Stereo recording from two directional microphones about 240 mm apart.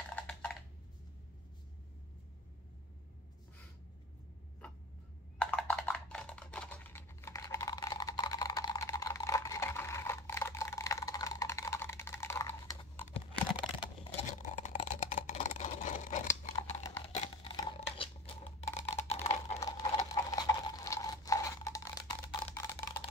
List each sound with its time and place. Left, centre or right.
0.1 s typing: centre
5.4 s typing: centre
13.6 s computer keyboard: left
16.8 s typing: centre
17.1 s a sound: left
19.0 s typing: left
19.6 s a sound: centre